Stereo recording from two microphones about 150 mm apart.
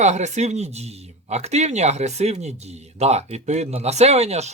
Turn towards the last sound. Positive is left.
turn(degrees=-45)  # may be behind; listen again after turning